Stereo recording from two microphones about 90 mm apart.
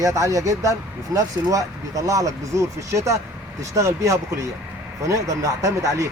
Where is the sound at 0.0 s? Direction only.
35° right (ahead or behind).